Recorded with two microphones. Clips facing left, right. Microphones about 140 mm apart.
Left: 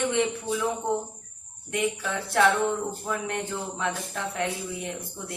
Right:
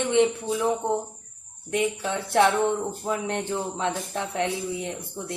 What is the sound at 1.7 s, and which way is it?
Speech, 25° right (ahead or behind).